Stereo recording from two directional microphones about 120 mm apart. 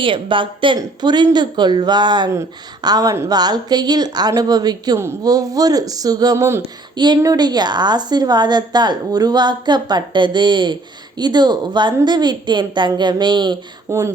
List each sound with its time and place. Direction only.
0.0 s a woman's voice: 45° right (ahead or behind); by 6.6 s 25° right (ahead or behind)
6.9 s a woman's voice: 40° right (ahead or behind)
13.9 s speech: 25° right (ahead or behind)